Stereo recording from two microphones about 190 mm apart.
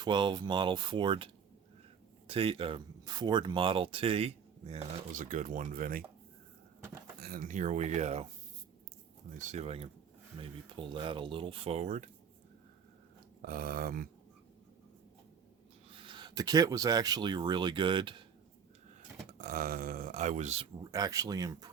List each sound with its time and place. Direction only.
0.0 s speech: 25° right (ahead or behind); by 6.0 s 50° right (ahead or behind)
7.2 s speech: 50° right (ahead or behind)
9.4 s speech: 35° right (ahead or behind)
13.5 s speech: 50° right (ahead or behind)
16.0 s speech: 25° right (ahead or behind)
19.4 s speech: 50° right (ahead or behind)
20.9 s speech: 20° right (ahead or behind)